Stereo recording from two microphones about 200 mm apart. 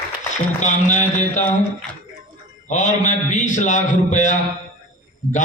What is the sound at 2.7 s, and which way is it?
A man's voice, 40° left (ahead or behind).